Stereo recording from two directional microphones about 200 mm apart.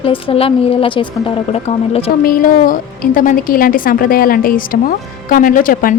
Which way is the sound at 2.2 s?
45° left (ahead or behind).